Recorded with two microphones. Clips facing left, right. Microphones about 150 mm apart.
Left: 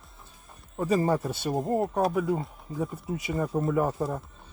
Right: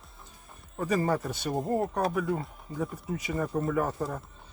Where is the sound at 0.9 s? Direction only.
25° left (ahead or behind).